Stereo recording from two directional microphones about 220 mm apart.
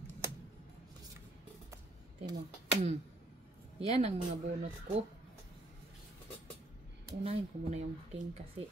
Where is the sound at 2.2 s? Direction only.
25° right (ahead or behind).